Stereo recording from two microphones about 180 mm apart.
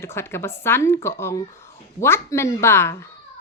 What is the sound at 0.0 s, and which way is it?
A woman's voice, 15° left (ahead or behind).